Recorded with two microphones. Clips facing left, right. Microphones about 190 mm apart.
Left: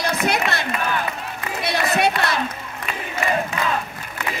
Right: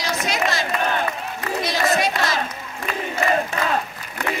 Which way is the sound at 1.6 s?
65° left (ahead or behind).